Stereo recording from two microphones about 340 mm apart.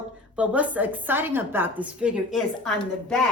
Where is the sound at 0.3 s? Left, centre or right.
Centre.